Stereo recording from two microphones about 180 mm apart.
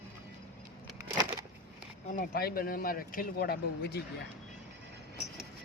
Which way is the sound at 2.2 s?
60° left (ahead or behind).